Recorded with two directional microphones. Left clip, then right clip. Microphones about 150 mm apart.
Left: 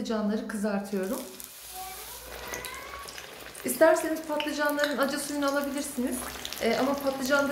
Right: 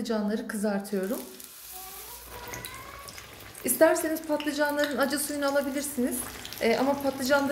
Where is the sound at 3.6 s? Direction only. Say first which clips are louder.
Even; 45° right (ahead or behind).